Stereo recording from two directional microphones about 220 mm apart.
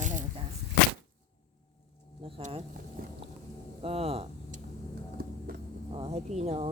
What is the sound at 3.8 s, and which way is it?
Speech, 25° right (ahead or behind).